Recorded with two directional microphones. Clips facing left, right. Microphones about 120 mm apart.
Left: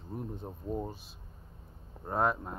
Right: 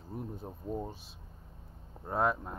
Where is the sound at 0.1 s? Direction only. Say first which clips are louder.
Left 1 dB; centre (ahead or behind).